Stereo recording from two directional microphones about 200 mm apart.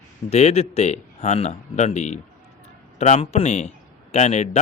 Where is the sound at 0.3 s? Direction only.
35° left (ahead or behind).